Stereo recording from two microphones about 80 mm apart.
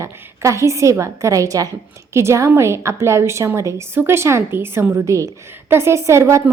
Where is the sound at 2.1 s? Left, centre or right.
Right.